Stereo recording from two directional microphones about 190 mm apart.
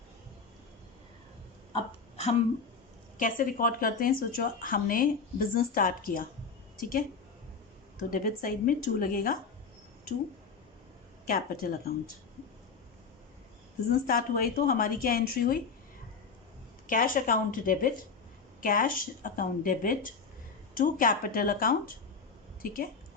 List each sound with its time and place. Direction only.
1.7 s a sound: 35° left (ahead or behind)
3.2 s speech: 45° left (ahead or behind)
8.1 s speech: 50° left (ahead or behind)
11.3 s speech: 50° left (ahead or behind)
14.1 s speech: 50° left (ahead or behind)
16.8 s speech: 45° left (ahead or behind)